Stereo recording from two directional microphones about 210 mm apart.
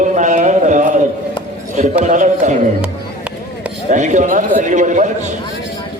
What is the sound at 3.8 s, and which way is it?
A man's voice, 35° right (ahead or behind).